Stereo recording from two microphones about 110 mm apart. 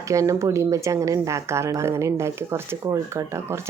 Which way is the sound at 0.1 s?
25° right (ahead or behind).